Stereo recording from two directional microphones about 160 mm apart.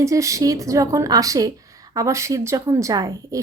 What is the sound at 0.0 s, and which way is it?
A woman's voice, 20° right (ahead or behind).